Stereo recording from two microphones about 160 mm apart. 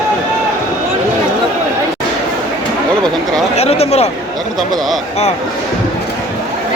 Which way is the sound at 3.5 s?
40° left (ahead or behind).